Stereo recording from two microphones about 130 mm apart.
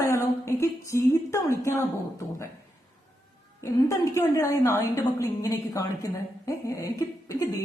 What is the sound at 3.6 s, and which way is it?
A woman's voice, 20° left (ahead or behind).